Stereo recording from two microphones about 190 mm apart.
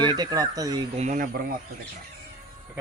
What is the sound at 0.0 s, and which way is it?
Speech, 20° right (ahead or behind).